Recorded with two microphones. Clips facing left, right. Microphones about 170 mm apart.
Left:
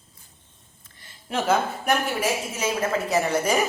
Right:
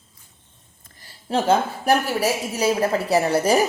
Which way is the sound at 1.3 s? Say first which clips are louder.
Right 3 dB; 30° right (ahead or behind).